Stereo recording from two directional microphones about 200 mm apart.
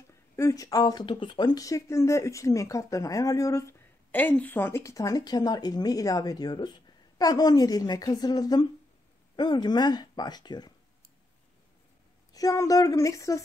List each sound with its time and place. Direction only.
0.4 s speech: 15° left (ahead or behind)
12.3 s speech: 15° left (ahead or behind)